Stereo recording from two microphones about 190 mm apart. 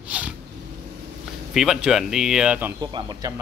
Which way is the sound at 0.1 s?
5° right (ahead or behind).